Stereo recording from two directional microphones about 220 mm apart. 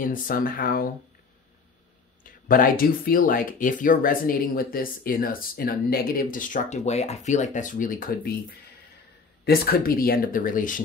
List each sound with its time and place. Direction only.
0.0 s speech: 40° left (ahead or behind)
2.2 s speech: 40° left (ahead or behind)
9.4 s speech: 45° left (ahead or behind)